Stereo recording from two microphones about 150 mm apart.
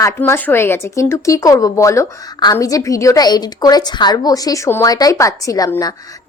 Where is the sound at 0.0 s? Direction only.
15° left (ahead or behind).